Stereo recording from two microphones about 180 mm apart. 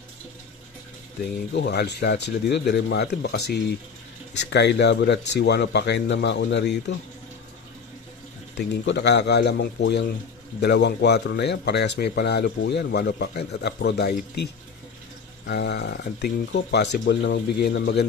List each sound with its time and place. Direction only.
1.5 s speech: 70° left (ahead or behind)
8.5 s speech: 75° left (ahead or behind)
15.4 s speech: 75° left (ahead or behind)